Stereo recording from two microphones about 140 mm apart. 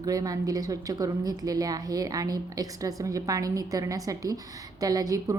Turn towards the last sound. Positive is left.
turn(degrees=-25)  # may be behind; listen again after turning